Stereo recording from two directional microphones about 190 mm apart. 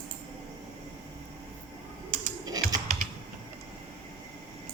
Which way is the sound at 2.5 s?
20° right (ahead or behind).